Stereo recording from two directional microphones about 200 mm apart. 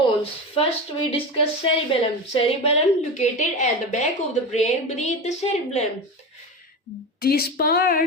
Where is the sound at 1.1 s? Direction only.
25° left (ahead or behind).